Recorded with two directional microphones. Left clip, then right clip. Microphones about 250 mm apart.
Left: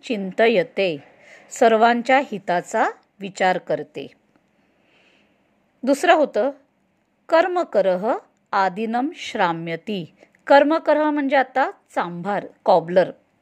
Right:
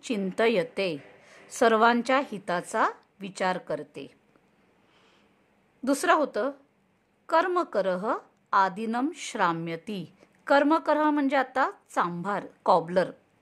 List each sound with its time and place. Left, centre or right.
0.0 s a woman's voice: centre
4.9 s a sound: centre
5.9 s a woman's voice: centre